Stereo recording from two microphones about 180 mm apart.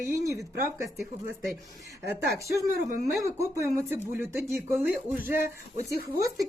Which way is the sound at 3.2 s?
15° right (ahead or behind).